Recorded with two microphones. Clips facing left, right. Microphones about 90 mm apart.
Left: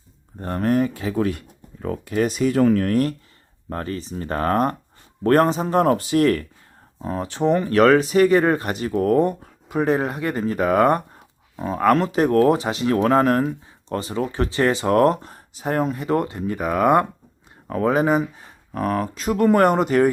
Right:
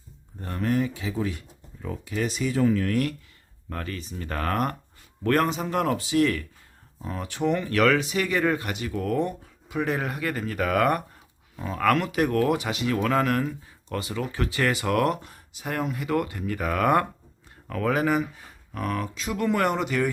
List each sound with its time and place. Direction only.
0.3 s speech: 45° left (ahead or behind)
6.0 s speech: 50° left (ahead or behind)
7.0 s speech: 35° left (ahead or behind)